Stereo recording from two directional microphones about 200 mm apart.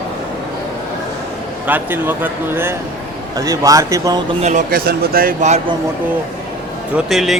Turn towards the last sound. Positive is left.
turn(degrees=0)  # may be behind; listen again after turning